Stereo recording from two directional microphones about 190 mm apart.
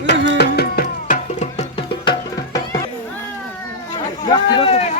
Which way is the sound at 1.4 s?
30° left (ahead or behind).